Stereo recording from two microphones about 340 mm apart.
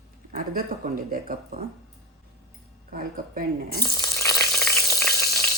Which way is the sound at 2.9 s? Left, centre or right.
Right.